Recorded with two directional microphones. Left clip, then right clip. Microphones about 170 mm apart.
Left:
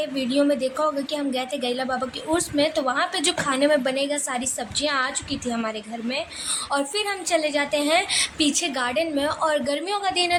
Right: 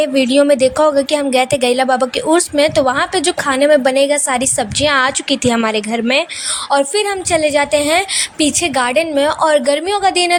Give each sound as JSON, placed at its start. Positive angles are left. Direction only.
{"t": 0.0, "sound": "speech", "side_deg": -50}
{"t": 6.7, "sound": "speech", "side_deg": -45}